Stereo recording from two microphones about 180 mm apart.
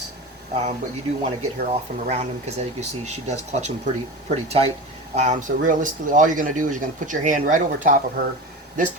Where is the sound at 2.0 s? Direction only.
40° right (ahead or behind).